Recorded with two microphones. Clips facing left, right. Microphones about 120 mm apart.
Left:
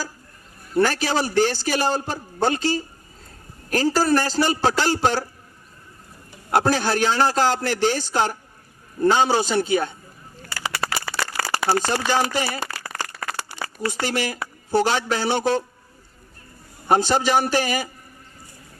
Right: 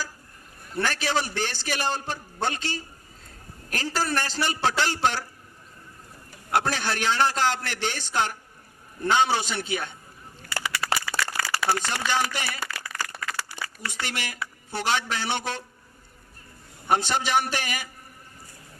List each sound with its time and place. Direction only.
0.8 s a man's voice: 35° left (ahead or behind)
6.5 s a man's voice: 35° left (ahead or behind)
10.6 s a sound: 35° left (ahead or behind)
11.2 s crumpling: 35° left (ahead or behind)
13.8 s a man's voice: 35° left (ahead or behind)
16.9 s a man's voice: 35° left (ahead or behind)